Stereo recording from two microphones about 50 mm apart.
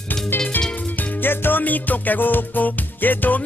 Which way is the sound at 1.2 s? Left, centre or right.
Left.